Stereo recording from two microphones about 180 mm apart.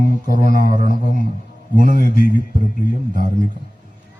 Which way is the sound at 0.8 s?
50° right (ahead or behind).